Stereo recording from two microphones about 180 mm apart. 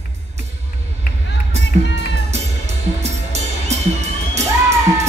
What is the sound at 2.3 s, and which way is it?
Music, 35° right (ahead or behind).